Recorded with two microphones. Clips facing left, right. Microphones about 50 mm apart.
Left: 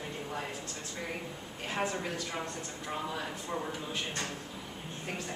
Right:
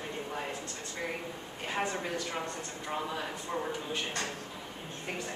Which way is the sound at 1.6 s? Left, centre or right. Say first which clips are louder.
Even; centre.